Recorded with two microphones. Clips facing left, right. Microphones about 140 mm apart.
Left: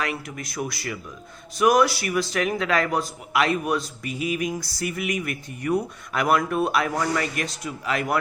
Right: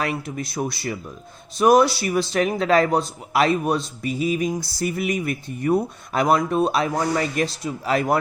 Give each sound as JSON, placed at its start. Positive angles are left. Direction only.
{"t": 0.0, "sound": "speech", "side_deg": -30}